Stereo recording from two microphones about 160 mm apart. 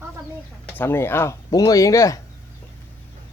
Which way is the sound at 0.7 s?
15° left (ahead or behind).